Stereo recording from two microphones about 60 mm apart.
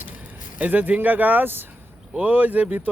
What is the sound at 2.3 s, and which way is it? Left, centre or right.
Speech, right.